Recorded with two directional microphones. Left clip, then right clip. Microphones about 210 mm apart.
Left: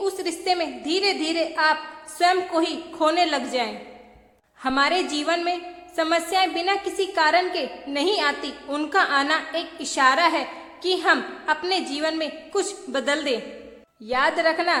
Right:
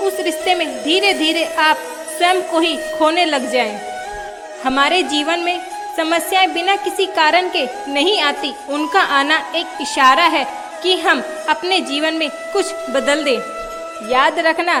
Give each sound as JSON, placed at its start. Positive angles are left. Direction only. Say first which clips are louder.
{"t": 0.0, "sound": "a woman's voice", "louder": "right 8 dB", "side_deg": -25}